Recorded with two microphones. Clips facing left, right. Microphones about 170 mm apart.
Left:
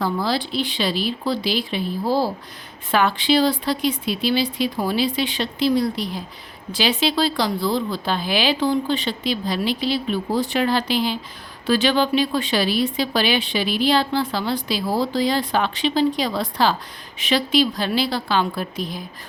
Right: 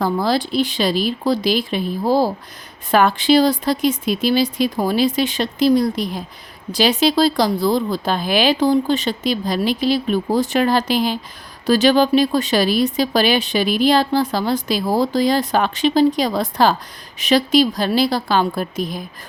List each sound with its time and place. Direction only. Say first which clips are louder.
0.0 s a woman's voice: right 4 dB; 45° right (ahead or behind)